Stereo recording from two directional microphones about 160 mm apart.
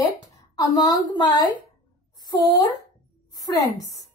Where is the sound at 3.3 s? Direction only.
25° left (ahead or behind).